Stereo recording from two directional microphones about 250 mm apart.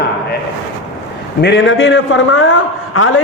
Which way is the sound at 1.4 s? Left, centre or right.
Left.